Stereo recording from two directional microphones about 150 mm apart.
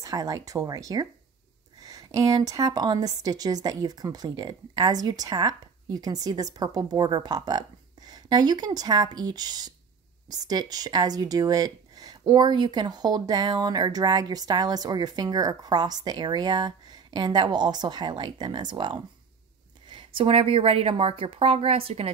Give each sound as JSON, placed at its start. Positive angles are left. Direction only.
{"t": 0.0, "sound": "a woman's voice", "side_deg": -20}